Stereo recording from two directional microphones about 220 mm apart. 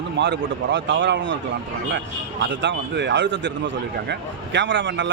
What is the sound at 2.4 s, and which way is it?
A man's voice, 55° right (ahead or behind).